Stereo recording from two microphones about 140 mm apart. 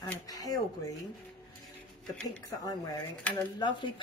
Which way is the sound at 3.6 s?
35° left (ahead or behind).